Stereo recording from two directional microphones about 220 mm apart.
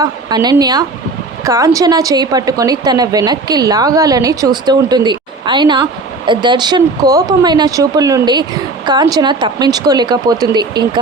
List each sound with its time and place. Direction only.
0.3 s a woman's voice: 20° right (ahead or behind)